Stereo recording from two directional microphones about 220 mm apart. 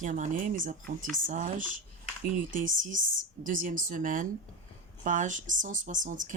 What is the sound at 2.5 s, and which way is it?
Speech, 35° right (ahead or behind).